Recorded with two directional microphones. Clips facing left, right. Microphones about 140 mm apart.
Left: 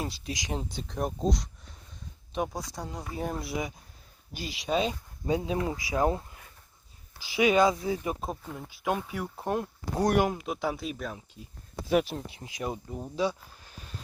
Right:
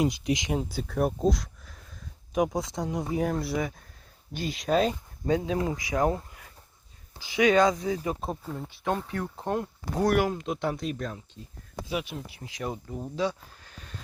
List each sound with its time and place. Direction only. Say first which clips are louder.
0.0 s speech: right 9 dB; 20° right (ahead or behind)
0.5 s speech: right 5 dB; 5° right (ahead or behind)
2.3 s speech: right 6 dB; 15° right (ahead or behind)
3.2 s speech: right 5 dB; centre (ahead or behind)
3.5 s speech: right 4 dB; 15° left (ahead or behind)
4.5 s speech: right 3 dB; centre (ahead or behind)
5.2 s speech: right 2 dB; 20° left (ahead or behind)
7.1 s speech: right 2 dB; 25° right (ahead or behind)
7.7 s speech: right 1 dB; 30° left (ahead or behind)
8.1 s speech: right 2 dB; centre (ahead or behind); by 10.4 s 20° left (ahead or behind)
10.4 s speech: right 2 dB; 5° left (ahead or behind)
11.9 s speech: left 7 dB; 40° left (ahead or behind)
12.3 s speech: even; 20° left (ahead or behind)